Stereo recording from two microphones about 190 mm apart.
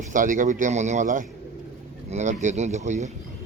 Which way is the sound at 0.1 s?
45° right (ahead or behind).